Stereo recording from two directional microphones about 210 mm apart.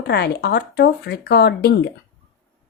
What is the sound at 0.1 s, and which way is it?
A woman's voice, 50° left (ahead or behind).